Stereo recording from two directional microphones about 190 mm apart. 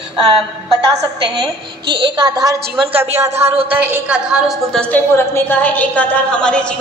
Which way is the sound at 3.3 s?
35° right (ahead or behind).